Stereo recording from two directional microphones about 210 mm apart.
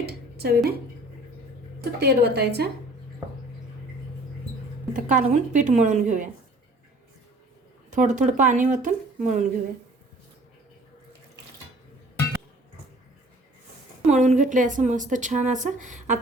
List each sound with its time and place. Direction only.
0.0 s a sound: 50° right (ahead or behind)
1.8 s a woman's voice: 50° right (ahead or behind)
4.9 s a woman's voice: 35° right (ahead or behind)
7.9 s a woman's voice: 35° right (ahead or behind)
14.1 s a woman's voice: 35° right (ahead or behind)